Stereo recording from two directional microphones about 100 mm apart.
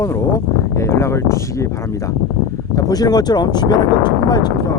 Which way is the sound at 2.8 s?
40° left (ahead or behind).